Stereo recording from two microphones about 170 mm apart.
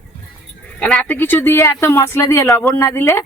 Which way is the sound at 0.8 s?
5° left (ahead or behind).